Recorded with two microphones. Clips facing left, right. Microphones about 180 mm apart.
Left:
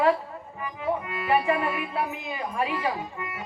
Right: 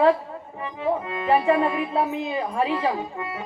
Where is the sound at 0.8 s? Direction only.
30° right (ahead or behind).